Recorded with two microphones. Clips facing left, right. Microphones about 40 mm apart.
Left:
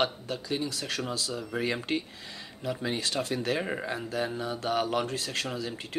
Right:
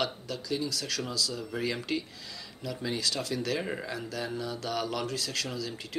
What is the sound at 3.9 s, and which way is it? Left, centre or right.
Speech, left.